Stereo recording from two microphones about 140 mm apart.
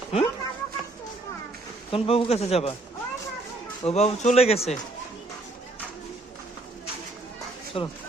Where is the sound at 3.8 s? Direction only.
50° left (ahead or behind).